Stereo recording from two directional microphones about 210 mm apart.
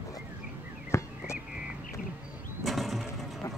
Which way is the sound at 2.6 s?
Centre (ahead or behind).